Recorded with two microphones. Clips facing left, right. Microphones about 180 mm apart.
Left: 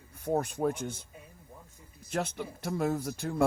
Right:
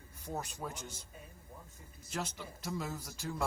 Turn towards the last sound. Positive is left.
turn(degrees=55)  # may be behind; listen again after turning